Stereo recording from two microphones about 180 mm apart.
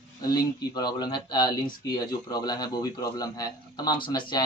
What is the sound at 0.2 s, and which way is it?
Speech, 20° left (ahead or behind).